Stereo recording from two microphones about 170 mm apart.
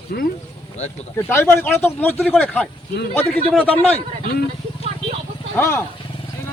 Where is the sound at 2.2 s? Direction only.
Centre (ahead or behind).